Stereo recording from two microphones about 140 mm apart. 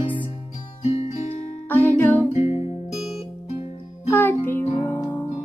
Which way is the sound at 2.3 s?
50° left (ahead or behind).